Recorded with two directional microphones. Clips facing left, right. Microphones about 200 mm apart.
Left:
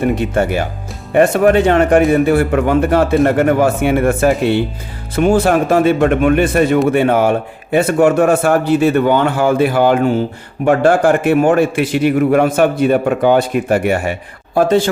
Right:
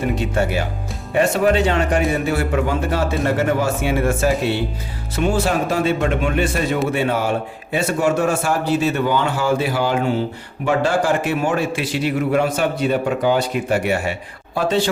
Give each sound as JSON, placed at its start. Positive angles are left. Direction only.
{"t": 0.2, "sound": "a man's voice", "side_deg": 55}